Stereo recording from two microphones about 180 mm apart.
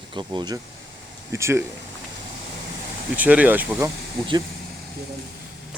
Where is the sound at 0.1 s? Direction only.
25° right (ahead or behind).